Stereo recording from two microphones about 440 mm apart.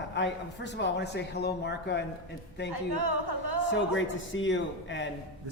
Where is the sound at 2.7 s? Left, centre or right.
Right.